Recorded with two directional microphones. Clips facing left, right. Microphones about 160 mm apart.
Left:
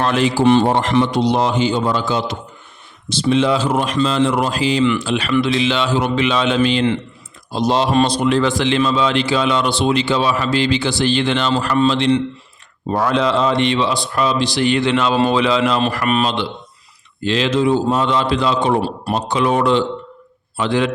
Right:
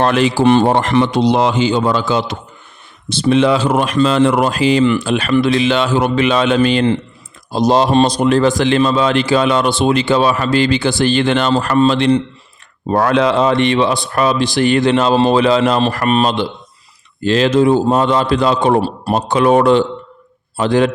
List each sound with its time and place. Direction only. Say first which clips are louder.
0.1 s speech: right 2 dB; 70° right (ahead or behind)
3.1 s speech: right 3 dB; 60° right (ahead or behind)
12.9 s speech: right 4 dB; 60° right (ahead or behind); by 20.9 s 45° right (ahead or behind)